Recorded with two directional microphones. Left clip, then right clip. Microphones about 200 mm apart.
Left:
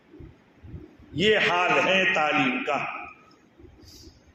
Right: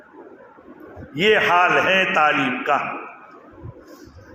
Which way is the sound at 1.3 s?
20° right (ahead or behind).